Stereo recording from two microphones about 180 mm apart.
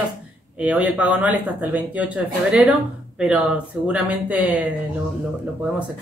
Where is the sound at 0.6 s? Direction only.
5° right (ahead or behind).